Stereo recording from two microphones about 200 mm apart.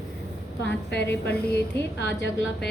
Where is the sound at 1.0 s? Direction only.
10° left (ahead or behind).